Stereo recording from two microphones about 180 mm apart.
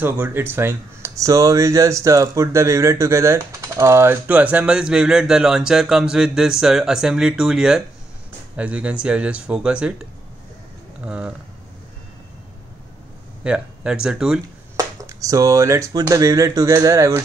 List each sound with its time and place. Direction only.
0.0 s speech: 10° right (ahead or behind)
11.1 s speech: 5° right (ahead or behind)
13.4 s speech: 5° right (ahead or behind)
15.0 s speech: 20° right (ahead or behind)